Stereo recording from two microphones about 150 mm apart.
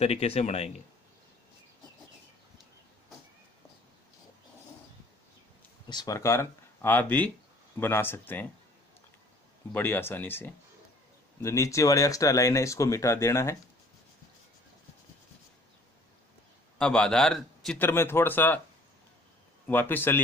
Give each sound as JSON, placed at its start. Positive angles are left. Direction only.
{"t": 0.0, "sound": "speech", "side_deg": 45}
{"t": 5.9, "sound": "speech", "side_deg": 25}
{"t": 9.7, "sound": "speech", "side_deg": 15}
{"t": 16.7, "sound": "a man's voice", "side_deg": 5}
{"t": 17.7, "sound": "speech", "side_deg": 15}
{"t": 19.7, "sound": "speech", "side_deg": 15}